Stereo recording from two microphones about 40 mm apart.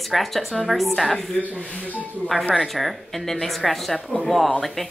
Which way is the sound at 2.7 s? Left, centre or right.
Centre.